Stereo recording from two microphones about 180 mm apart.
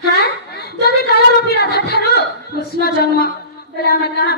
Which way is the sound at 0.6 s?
60° left (ahead or behind).